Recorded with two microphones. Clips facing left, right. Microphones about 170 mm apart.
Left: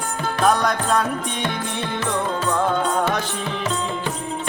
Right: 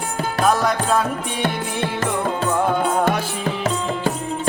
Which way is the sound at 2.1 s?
10° right (ahead or behind).